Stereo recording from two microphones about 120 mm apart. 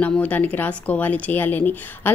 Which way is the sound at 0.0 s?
10° left (ahead or behind).